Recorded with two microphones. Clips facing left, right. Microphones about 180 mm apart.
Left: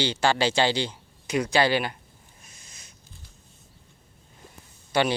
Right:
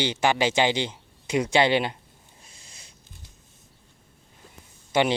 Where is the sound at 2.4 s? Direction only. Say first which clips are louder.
Even; 25° right (ahead or behind).